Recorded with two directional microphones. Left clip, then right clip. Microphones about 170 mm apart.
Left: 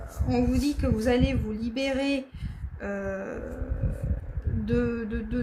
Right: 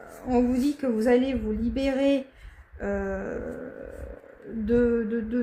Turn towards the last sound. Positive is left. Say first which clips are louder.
# right 5 dB
turn(degrees=-40)  # may be behind; listen again after turning